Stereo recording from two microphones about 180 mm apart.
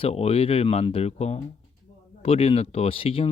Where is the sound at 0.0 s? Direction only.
35° left (ahead or behind).